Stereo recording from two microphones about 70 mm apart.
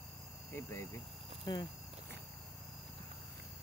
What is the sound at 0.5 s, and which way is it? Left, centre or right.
Speech, left.